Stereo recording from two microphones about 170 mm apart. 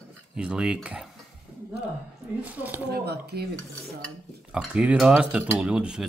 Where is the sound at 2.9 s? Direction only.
70° right (ahead or behind).